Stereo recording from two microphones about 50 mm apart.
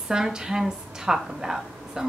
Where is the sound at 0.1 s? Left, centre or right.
Centre.